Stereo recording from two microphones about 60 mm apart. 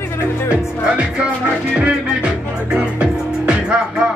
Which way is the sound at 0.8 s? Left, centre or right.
Centre.